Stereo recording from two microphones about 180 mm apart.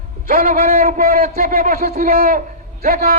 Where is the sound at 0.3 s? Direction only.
50° right (ahead or behind).